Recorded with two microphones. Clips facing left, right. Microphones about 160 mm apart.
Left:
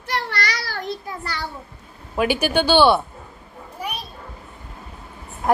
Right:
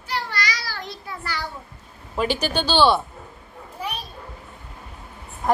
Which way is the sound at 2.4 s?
55° left (ahead or behind).